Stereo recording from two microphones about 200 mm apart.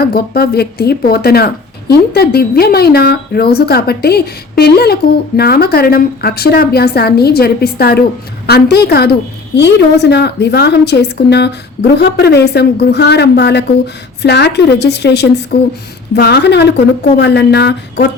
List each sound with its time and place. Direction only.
0.0 s a woman's voice: 50° left (ahead or behind)